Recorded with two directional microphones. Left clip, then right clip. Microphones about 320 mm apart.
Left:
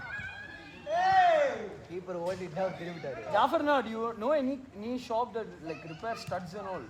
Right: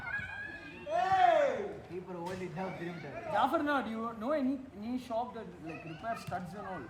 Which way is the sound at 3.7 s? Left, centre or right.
Centre.